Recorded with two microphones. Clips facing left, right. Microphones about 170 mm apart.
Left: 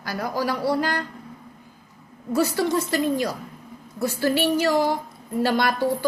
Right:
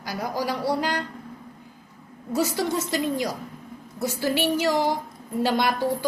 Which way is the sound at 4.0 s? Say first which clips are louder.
Left 2 dB; 20° right (ahead or behind).